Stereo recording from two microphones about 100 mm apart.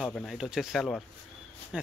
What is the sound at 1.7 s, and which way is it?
Speech, 10° right (ahead or behind).